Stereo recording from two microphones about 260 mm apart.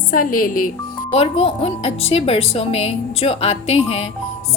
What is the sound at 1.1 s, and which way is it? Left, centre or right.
A woman's voice, left.